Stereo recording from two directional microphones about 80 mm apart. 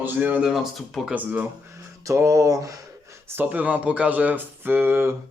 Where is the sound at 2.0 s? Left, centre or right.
Right.